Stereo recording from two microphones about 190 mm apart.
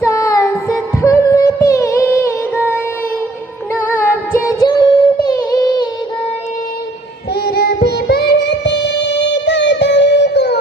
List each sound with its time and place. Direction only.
0.0 s music: 15° left (ahead or behind)
3.8 s singing: 10° left (ahead or behind)
7.3 s music: 55° left (ahead or behind)